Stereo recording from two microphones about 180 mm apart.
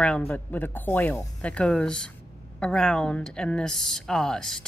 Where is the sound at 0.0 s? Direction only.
10° left (ahead or behind).